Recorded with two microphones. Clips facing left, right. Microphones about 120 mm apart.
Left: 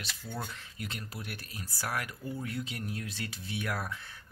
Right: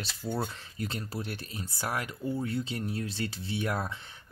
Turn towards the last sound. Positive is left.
turn(degrees=-25)  # may be behind; listen again after turning